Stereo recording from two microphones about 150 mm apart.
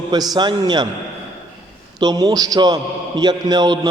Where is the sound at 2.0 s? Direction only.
25° right (ahead or behind).